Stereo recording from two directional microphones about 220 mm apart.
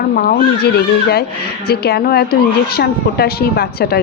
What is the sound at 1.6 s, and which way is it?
Speech, 45° left (ahead or behind).